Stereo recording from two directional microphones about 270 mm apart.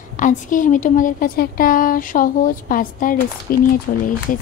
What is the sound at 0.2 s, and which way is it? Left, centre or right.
Speech, left.